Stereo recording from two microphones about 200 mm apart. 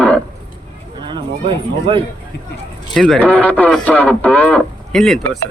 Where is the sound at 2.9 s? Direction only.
5° left (ahead or behind).